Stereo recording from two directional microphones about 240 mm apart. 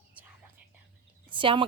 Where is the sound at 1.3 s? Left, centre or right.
Right.